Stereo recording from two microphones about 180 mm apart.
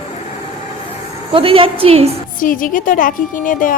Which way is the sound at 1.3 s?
30° right (ahead or behind).